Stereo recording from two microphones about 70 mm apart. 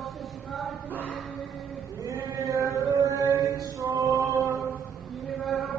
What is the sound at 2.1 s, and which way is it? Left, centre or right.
Chant, right.